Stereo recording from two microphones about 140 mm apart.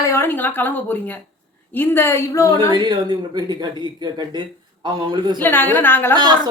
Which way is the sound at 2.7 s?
30° right (ahead or behind).